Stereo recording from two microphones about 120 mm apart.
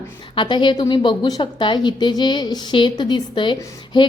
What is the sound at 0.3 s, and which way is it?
A woman's voice, 40° left (ahead or behind).